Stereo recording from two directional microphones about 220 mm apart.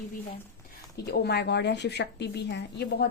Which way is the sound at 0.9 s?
50° left (ahead or behind).